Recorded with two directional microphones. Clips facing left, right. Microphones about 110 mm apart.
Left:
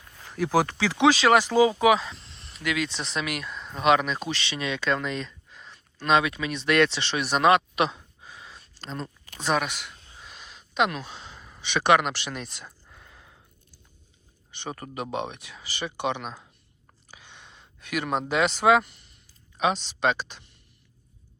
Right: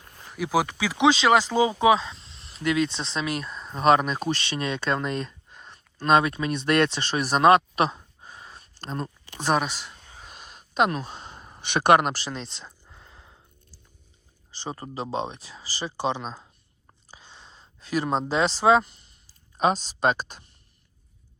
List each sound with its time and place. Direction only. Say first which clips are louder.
0.3 s speech: left 1 dB; 10° right (ahead or behind); by 9.9 s 30° right (ahead or behind)
10.2 s speech: left 1 dB; 45° right (ahead or behind); by 12.7 s 25° right (ahead or behind)
12.8 s a sound: right 1 dB; 25° right (ahead or behind)
14.5 s speech: right 1 dB; 30° right (ahead or behind)
17.1 s a sound: even; 30° right (ahead or behind)
19.5 s speech: right 2 dB; 40° right (ahead or behind)